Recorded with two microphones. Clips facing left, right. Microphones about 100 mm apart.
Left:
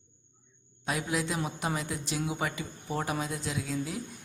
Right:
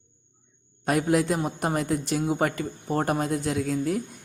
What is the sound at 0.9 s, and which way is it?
Speech, 55° right (ahead or behind).